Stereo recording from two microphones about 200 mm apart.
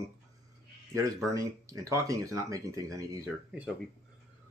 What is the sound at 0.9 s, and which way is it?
Speech, 15° right (ahead or behind).